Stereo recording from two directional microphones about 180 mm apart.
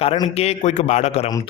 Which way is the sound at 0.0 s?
35° left (ahead or behind).